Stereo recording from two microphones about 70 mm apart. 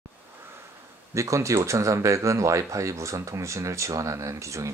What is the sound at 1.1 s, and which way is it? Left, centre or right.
Speech, right.